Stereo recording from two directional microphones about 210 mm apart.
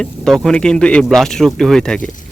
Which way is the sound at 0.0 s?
5° left (ahead or behind).